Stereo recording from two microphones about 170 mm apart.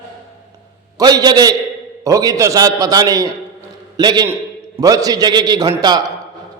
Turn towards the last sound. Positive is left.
turn(degrees=-25)  # may be behind; listen again after turning